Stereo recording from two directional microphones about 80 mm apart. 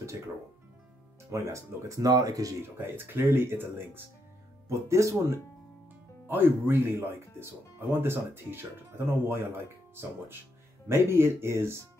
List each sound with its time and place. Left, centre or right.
1.3 s speech: right
2.0 s speech: right
2.6 s speech: right
4.6 s speech: right
6.2 s speech: right
10.9 s speech: right